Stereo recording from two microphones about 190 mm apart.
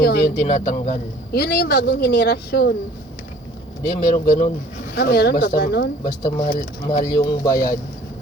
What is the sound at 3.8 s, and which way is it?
Speech, 45° left (ahead or behind).